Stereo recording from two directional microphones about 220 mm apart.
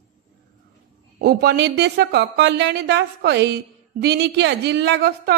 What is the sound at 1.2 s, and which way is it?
A woman's voice, 45° right (ahead or behind).